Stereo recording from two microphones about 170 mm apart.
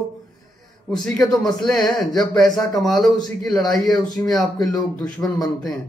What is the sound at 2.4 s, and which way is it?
Speech, 25° left (ahead or behind).